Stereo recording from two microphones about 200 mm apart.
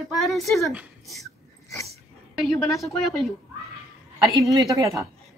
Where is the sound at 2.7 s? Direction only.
15° left (ahead or behind).